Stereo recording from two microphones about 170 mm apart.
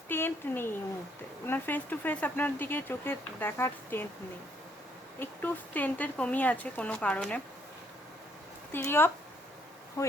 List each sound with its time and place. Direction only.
0.1 s speech: 15° left (ahead or behind)
5.2 s speech: 10° left (ahead or behind)
8.7 s speech: 15° left (ahead or behind)